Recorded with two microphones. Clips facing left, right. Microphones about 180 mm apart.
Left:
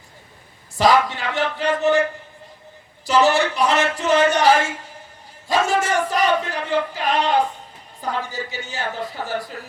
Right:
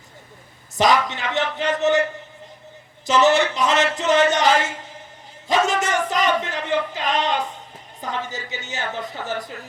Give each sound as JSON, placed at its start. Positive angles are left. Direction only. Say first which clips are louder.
{"t": 0.8, "sound": "a man's voice", "louder": "left 2 dB", "side_deg": -20}
{"t": 3.1, "sound": "a man's voice", "louder": "even", "side_deg": -20}
{"t": 5.5, "sound": "a sound", "louder": "even", "side_deg": -20}
{"t": 8.0, "sound": "a man's voice", "louder": "left 2 dB", "side_deg": -20}